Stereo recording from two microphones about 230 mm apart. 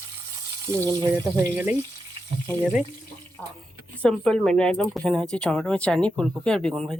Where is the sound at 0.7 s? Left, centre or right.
Centre.